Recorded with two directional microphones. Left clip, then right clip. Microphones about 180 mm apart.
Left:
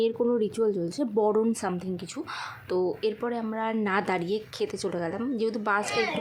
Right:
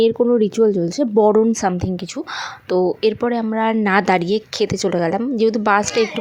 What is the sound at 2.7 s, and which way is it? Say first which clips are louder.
A woman's voice: right 10 dB; 35° right (ahead or behind).